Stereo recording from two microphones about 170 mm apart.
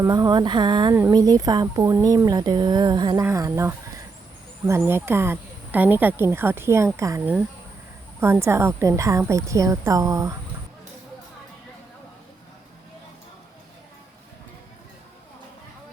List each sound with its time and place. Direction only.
0.0 s a woman's voice: 25° right (ahead or behind)